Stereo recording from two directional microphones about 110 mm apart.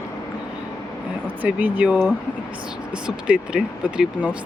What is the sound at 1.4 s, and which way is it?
Speech, 15° right (ahead or behind).